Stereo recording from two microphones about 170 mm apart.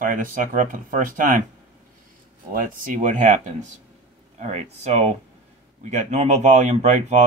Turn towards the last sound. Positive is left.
turn(degrees=-45)  # may be behind; listen again after turning